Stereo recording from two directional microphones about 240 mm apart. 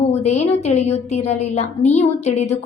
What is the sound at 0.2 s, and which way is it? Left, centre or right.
A woman's voice, left.